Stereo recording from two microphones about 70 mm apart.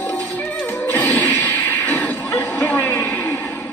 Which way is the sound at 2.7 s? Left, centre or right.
Left.